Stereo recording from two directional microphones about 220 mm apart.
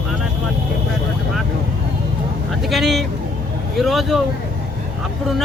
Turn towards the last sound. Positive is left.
turn(degrees=0)  # may be behind; listen again after turning